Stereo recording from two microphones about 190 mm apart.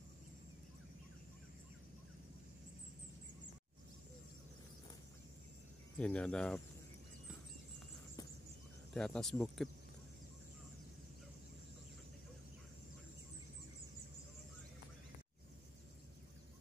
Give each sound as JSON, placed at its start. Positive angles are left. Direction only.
{"t": 5.9, "sound": "speech", "side_deg": 5}
{"t": 8.9, "sound": "speech", "side_deg": 5}